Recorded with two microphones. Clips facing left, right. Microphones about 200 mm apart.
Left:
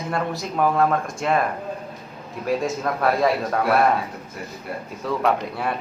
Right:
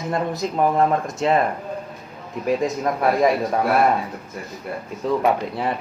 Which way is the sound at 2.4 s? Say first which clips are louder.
Right 2 dB; 15° right (ahead or behind).